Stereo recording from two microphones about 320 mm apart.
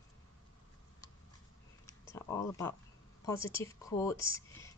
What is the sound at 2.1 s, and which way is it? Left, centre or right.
A woman's voice, centre.